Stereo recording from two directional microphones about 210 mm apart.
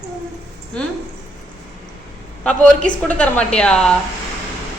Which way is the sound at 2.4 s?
5° left (ahead or behind).